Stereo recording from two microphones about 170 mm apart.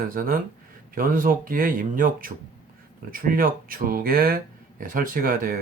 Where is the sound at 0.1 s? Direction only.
55° right (ahead or behind).